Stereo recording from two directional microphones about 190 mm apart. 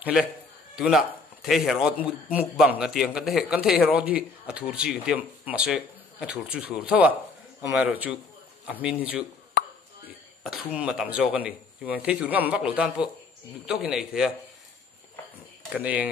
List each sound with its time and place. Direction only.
0.0 s a man's voice: 5° right (ahead or behind)
9.5 s plop: 55° left (ahead or behind)
10.8 s a man's voice: 5° right (ahead or behind)
15.7 s a man's voice: 10° right (ahead or behind)